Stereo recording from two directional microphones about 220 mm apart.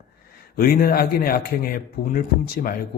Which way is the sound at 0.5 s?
40° left (ahead or behind).